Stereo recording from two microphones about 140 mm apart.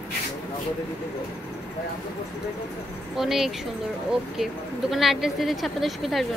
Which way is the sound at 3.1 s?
Centre (ahead or behind).